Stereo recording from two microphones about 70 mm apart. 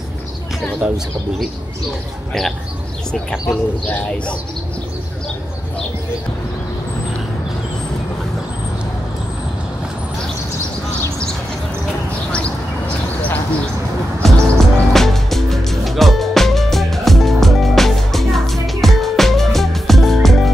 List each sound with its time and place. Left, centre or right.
0.7 s speech: centre
3.1 s speech: centre
12.3 s a sound: centre
14.2 s music: centre